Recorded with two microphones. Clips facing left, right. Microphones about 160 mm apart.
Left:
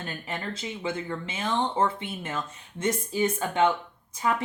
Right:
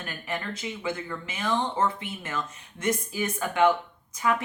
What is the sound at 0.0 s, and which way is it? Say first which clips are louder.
A woman's voice: even; 25° left (ahead or behind).